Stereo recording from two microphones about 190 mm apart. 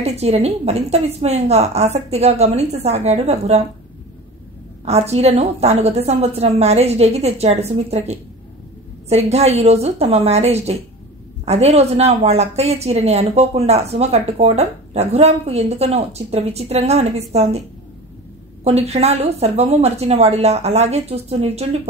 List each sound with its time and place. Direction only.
0.0 s a woman's voice: 35° right (ahead or behind)
4.8 s a woman's voice: 35° right (ahead or behind)
18.6 s a woman's voice: 35° right (ahead or behind)